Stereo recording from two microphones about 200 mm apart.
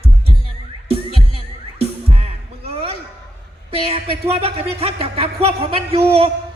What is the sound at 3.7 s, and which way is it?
Speech, 30° right (ahead or behind).